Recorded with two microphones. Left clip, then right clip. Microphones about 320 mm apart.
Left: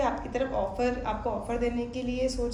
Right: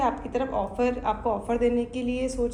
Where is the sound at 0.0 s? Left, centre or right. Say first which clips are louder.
Right 2 dB; right.